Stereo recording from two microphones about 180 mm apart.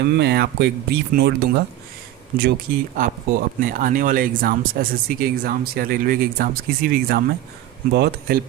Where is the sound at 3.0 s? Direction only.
50° right (ahead or behind).